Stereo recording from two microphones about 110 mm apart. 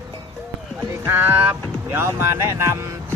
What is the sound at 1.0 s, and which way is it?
Speech, 20° right (ahead or behind).